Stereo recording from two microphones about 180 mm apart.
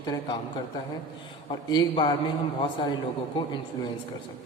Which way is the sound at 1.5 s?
25° left (ahead or behind).